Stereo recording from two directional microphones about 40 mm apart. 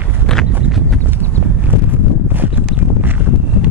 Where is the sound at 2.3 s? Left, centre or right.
Right.